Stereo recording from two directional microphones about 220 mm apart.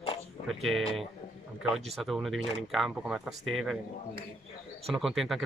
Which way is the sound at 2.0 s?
Centre (ahead or behind).